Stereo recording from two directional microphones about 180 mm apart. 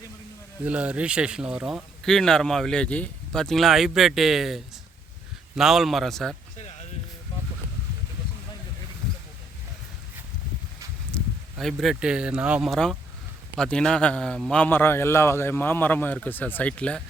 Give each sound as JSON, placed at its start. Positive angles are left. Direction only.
{"t": 0.6, "sound": "speech", "side_deg": -5}
{"t": 6.6, "sound": "a sound", "side_deg": 40}
{"t": 11.1, "sound": "a man's voice", "side_deg": 0}